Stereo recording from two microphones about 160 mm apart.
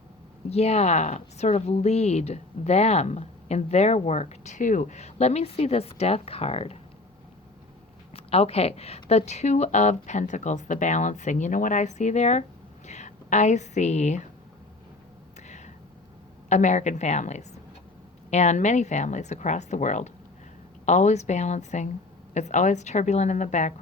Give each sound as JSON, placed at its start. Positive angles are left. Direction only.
{"t": 0.5, "sound": "a woman's voice", "side_deg": 40}
{"t": 8.1, "sound": "a woman's voice", "side_deg": 40}
{"t": 15.4, "sound": "a sound", "side_deg": 45}
{"t": 16.5, "sound": "a woman's voice", "side_deg": 45}